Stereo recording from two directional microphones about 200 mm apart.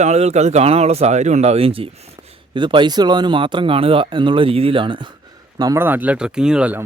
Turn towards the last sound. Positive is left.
turn(degrees=-5)  # may be behind; listen again after turning